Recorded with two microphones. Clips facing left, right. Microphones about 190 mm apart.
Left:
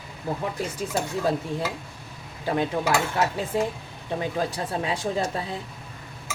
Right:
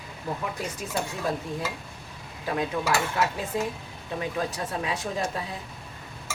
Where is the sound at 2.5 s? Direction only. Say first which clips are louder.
Left 2 dB; 30° left (ahead or behind).